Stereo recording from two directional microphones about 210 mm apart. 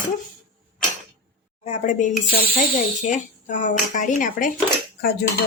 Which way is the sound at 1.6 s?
35° left (ahead or behind).